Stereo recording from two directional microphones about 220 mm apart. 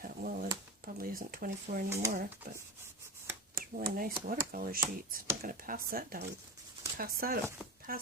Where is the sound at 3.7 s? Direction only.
40° right (ahead or behind).